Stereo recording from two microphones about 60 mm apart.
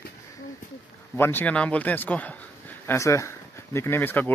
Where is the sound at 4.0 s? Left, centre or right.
Left.